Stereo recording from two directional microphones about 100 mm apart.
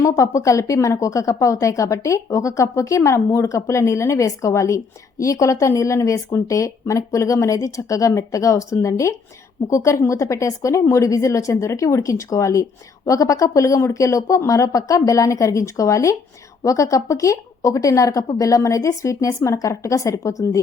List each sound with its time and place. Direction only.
0.0 s speech: 30° left (ahead or behind)